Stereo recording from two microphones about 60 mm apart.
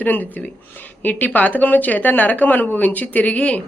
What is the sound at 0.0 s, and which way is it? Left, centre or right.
Speech, left.